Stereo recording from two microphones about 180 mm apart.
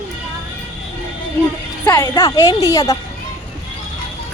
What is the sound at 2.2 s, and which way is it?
Speech, 20° left (ahead or behind).